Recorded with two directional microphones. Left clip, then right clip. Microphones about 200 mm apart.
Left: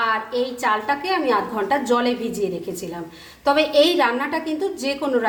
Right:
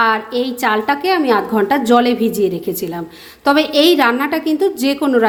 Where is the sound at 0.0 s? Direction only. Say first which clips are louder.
Right 6 dB; 40° right (ahead or behind).